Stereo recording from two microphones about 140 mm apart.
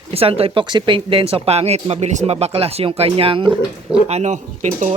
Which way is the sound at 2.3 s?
40° right (ahead or behind).